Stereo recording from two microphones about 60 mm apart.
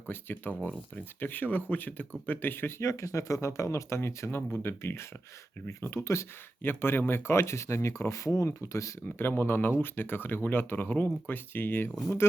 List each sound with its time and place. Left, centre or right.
0.1 s speech: left
2.8 s speech: left
6.6 s speech: left
9.0 s speech: left